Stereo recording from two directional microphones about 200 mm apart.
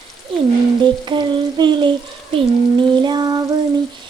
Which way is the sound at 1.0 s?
25° right (ahead or behind).